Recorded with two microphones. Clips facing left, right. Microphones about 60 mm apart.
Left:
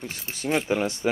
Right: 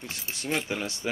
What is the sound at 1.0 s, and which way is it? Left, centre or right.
Speech, left.